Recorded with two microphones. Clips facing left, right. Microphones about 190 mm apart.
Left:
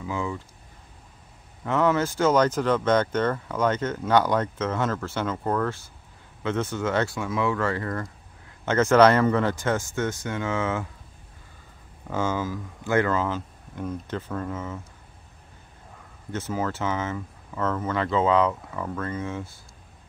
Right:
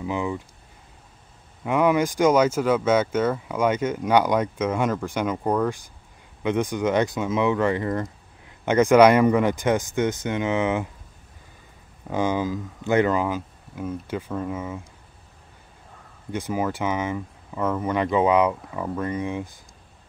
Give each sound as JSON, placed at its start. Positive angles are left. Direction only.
{"t": 0.0, "sound": "speech", "side_deg": -20}
{"t": 1.6, "sound": "speech", "side_deg": -15}
{"t": 12.1, "sound": "speech", "side_deg": -15}
{"t": 16.3, "sound": "speech", "side_deg": -15}